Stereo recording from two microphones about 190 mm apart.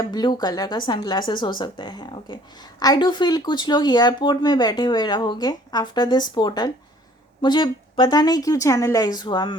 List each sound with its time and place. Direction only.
0.0 s a woman's voice: 20° left (ahead or behind)